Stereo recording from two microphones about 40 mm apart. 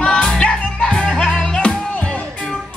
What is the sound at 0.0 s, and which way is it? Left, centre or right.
Music, left.